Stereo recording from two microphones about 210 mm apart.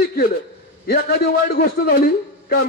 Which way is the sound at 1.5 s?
45° left (ahead or behind).